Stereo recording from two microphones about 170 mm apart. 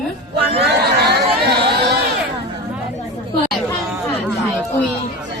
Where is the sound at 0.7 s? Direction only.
75° right (ahead or behind).